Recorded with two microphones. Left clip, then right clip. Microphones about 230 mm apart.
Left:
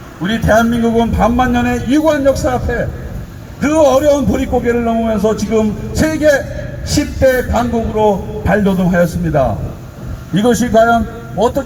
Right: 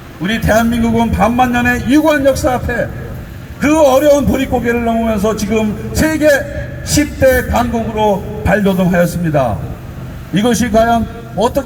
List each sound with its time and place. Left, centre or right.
0.2 s a man's voice: right